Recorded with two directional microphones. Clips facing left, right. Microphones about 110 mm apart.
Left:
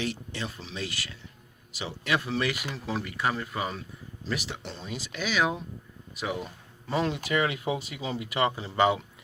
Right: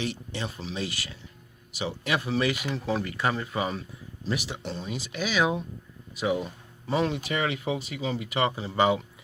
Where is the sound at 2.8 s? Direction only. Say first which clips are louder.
Right 1 dB; 5° left (ahead or behind); by 5.2 s 15° right (ahead or behind).